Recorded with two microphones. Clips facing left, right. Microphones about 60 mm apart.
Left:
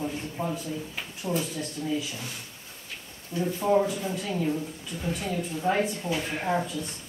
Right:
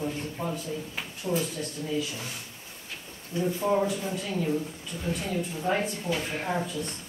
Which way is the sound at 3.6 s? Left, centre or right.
Centre.